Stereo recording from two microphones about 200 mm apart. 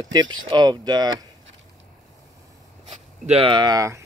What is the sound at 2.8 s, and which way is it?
Speech, 30° right (ahead or behind).